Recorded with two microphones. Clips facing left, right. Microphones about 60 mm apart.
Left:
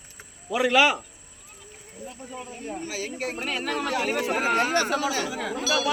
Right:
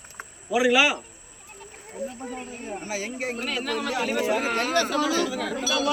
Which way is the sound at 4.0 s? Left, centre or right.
Left.